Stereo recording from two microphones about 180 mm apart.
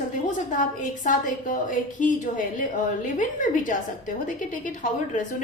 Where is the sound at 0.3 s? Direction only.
45° left (ahead or behind).